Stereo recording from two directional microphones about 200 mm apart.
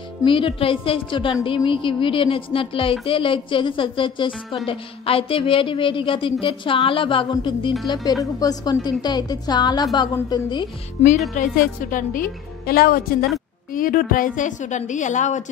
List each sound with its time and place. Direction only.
0.2 s speech: 25° left (ahead or behind)
11.0 s a woman's voice: 30° left (ahead or behind)